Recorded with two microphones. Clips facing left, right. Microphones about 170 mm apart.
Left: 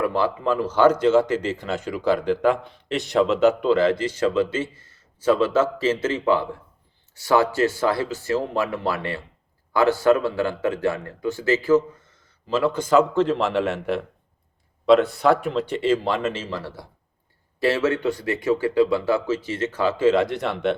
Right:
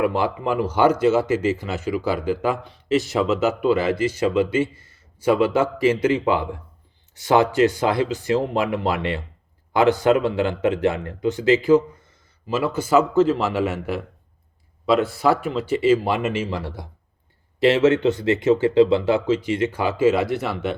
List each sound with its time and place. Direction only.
0.0 s a man's voice: 15° right (ahead or behind)